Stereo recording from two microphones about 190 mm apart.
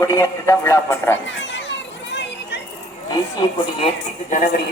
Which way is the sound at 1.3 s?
75° left (ahead or behind).